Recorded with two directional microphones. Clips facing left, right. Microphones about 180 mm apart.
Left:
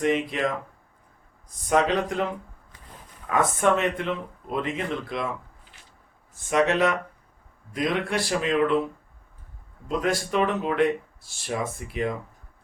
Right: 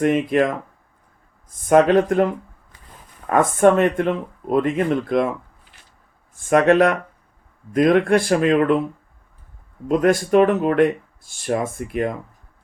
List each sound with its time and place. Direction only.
0.0 s speech: 50° right (ahead or behind)
3.2 s speech: 50° right (ahead or behind)
6.3 s speech: 50° right (ahead or behind)
10.0 s speech: 50° right (ahead or behind)